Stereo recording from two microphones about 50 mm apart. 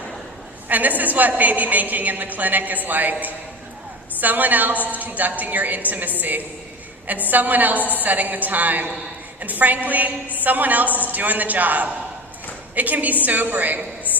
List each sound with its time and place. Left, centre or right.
0.7 s a woman's voice: right